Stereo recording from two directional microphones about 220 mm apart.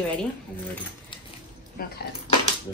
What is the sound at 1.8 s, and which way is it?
Speech, 40° left (ahead or behind).